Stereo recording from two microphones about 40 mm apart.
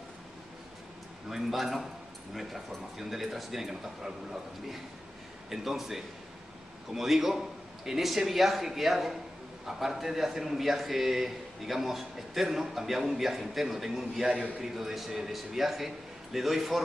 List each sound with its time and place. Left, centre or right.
1.3 s speech: centre
3.0 s speech: centre
5.5 s a man's voice: centre
14.2 s a man's voice: right
14.6 s a man's voice: centre